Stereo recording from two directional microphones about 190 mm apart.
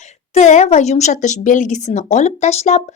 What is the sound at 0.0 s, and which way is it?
Speech, 35° left (ahead or behind).